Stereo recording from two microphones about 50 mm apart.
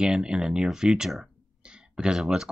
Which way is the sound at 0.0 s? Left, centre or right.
Centre.